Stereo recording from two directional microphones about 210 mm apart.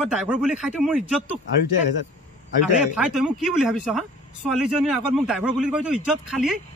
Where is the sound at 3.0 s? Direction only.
5° right (ahead or behind).